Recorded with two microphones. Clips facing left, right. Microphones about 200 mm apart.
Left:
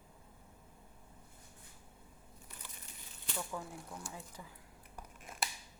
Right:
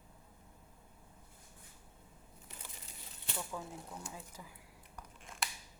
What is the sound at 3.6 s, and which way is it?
Speech, 20° right (ahead or behind).